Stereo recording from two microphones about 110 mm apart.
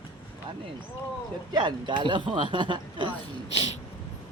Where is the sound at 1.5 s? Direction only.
45° right (ahead or behind).